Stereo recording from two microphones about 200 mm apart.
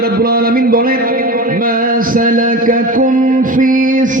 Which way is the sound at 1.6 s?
45° right (ahead or behind).